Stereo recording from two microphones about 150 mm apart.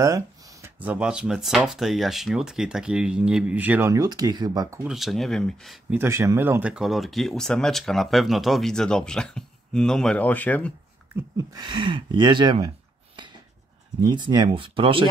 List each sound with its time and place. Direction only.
0.0 s speech: 20° right (ahead or behind)
3.9 s speech: 25° right (ahead or behind)
4.8 s speech: centre (ahead or behind)
5.9 s speech: 15° right (ahead or behind); by 10.7 s 10° left (ahead or behind)
11.1 s speech: 25° right (ahead or behind)